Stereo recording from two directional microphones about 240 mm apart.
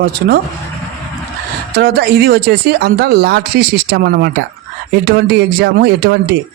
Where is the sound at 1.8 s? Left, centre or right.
Right.